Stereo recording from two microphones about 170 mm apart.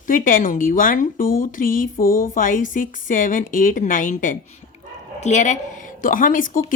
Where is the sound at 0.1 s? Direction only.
50° left (ahead or behind).